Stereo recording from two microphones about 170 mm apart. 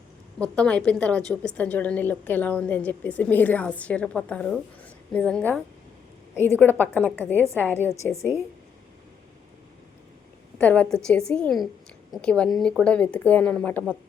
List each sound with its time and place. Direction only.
0.3 s a woman's voice: 5° left (ahead or behind)
10.6 s a woman's voice: 10° left (ahead or behind)